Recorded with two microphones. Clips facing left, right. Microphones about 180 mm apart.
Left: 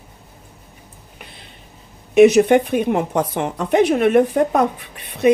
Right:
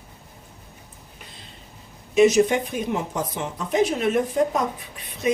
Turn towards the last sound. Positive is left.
turn(degrees=65)  # may be behind; listen again after turning